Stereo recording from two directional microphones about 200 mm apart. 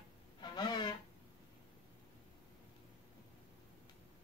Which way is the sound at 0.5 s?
20° left (ahead or behind).